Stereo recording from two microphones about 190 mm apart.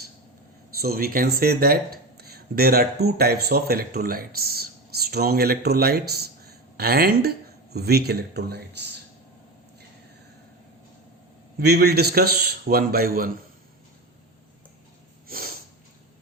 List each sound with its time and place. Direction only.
0.8 s speech: 55° right (ahead or behind)
11.6 s a man's voice: 60° right (ahead or behind)
15.3 s snort: 50° right (ahead or behind)